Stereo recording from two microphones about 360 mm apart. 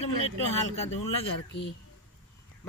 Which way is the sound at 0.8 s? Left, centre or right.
Centre.